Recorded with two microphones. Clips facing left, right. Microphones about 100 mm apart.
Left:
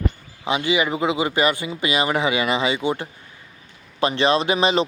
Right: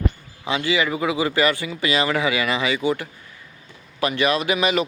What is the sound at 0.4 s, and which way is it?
Speech, 20° left (ahead or behind).